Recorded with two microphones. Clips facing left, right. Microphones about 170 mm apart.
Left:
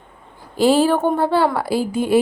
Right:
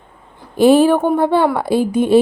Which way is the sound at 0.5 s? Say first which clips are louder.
Right 5 dB; 20° right (ahead or behind).